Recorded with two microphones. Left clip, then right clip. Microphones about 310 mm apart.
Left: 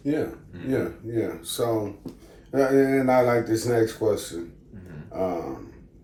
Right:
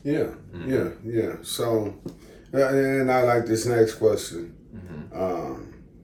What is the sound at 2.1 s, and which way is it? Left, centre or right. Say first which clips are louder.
Speech: right 1 dB; left.